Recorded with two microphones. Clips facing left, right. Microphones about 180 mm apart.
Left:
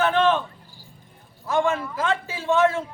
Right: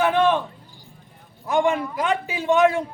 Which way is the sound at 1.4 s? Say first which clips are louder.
Right 2 dB; 15° right (ahead or behind).